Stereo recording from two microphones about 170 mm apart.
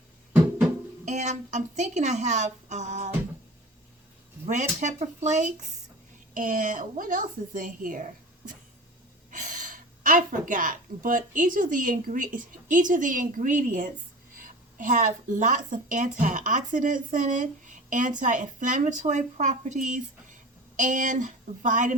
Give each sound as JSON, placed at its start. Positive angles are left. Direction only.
{"t": 1.0, "sound": "a woman's voice", "side_deg": -45}
{"t": 4.4, "sound": "a woman's voice", "side_deg": -45}
{"t": 9.3, "sound": "a woman's voice", "side_deg": -50}